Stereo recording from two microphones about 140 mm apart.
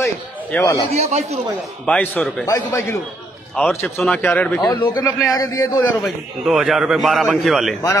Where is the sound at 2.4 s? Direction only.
20° left (ahead or behind).